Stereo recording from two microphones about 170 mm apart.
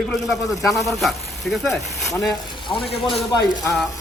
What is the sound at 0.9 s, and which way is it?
Speech, centre (ahead or behind).